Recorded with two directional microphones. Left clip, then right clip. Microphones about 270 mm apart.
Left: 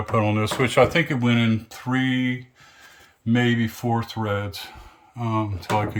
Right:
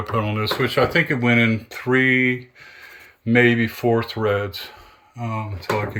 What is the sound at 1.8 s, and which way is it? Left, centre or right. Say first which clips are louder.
Speech: right 7 dB; left.